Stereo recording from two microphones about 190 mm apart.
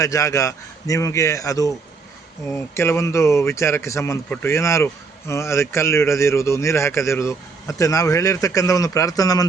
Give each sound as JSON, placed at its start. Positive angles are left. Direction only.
{"t": 0.0, "sound": "a man's voice", "side_deg": 15}